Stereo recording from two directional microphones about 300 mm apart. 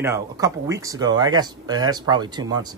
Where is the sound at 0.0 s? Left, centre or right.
Centre.